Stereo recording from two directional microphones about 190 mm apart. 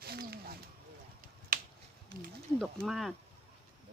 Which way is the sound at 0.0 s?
55° right (ahead or behind).